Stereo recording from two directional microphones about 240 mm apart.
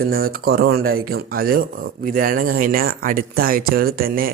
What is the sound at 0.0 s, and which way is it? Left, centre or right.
Speech, right.